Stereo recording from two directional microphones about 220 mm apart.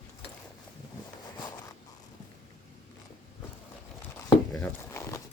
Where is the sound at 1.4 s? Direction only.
20° left (ahead or behind).